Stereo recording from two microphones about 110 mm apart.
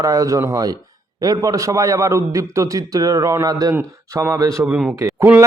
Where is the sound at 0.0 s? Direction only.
30° right (ahead or behind).